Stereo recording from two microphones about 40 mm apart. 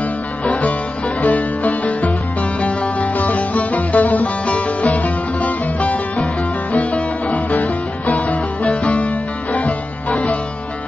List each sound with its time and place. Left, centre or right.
0.5 s music: left